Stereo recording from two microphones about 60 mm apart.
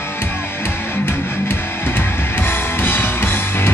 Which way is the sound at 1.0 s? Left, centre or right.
Left.